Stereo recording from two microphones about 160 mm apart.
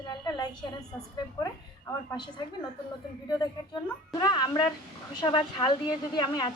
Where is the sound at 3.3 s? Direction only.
25° left (ahead or behind).